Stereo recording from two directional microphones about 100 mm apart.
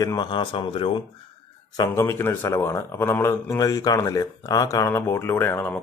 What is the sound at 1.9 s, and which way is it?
A man's voice, 25° left (ahead or behind).